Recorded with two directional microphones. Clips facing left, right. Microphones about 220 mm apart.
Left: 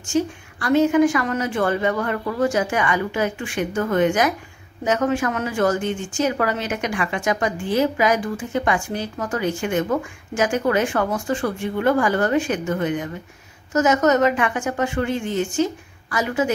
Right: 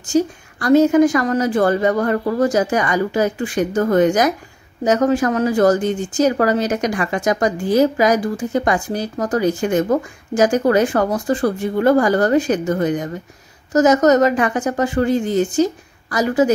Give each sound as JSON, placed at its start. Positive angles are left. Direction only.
{"t": 0.1, "sound": "speech", "side_deg": -40}